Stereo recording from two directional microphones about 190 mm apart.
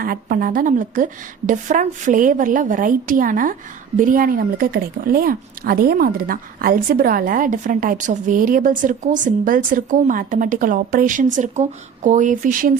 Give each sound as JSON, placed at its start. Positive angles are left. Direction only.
{"t": 0.0, "sound": "speech", "side_deg": -50}